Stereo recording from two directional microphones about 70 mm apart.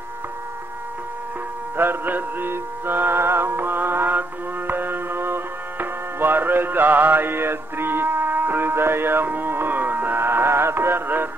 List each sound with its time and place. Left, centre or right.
1.8 s music: right